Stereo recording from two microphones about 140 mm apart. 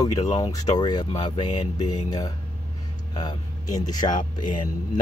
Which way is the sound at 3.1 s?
30° left (ahead or behind).